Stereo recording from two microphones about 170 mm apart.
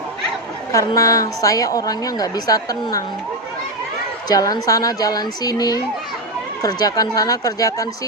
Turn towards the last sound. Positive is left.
turn(degrees=20)  # may be behind; listen again after turning